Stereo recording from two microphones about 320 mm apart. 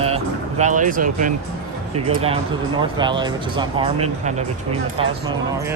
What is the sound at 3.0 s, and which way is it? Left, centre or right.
Speech, centre.